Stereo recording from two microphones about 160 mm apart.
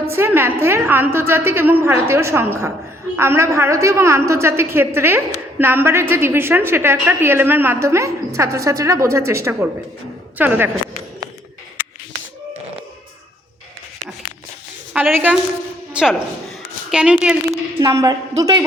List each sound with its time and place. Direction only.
0.1 s a woman's voice: 15° right (ahead or behind)
14.9 s a woman's voice: 10° right (ahead or behind)
17.7 s a woman's voice: 20° right (ahead or behind)